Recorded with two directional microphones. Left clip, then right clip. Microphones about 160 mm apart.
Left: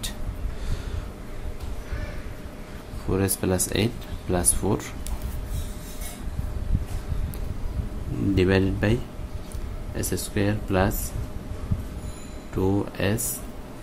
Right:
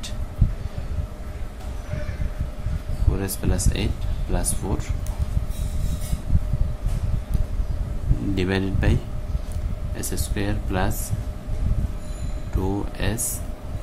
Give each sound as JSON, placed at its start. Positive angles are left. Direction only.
{"t": 3.1, "sound": "speech", "side_deg": 30}
{"t": 8.4, "sound": "speech", "side_deg": 20}
{"t": 9.9, "sound": "speech", "side_deg": 20}
{"t": 12.5, "sound": "speech", "side_deg": 20}